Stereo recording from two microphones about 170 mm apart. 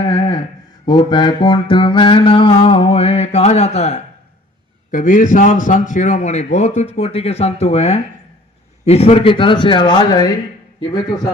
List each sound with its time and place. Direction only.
0.0 s a sound: 25° left (ahead or behind)
0.9 s mantra: 25° left (ahead or behind)
4.9 s a man's voice: 50° left (ahead or behind); by 10.3 s 25° left (ahead or behind)